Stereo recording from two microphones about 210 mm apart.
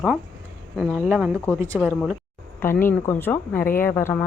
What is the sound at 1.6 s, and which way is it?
Speech, 5° left (ahead or behind).